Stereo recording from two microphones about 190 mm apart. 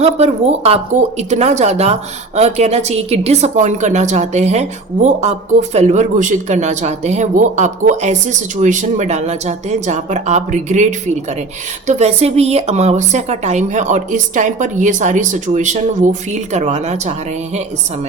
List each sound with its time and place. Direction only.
0.0 s speech: 35° right (ahead or behind)